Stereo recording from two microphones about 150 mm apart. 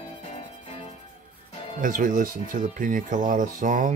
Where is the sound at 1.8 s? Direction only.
65° right (ahead or behind).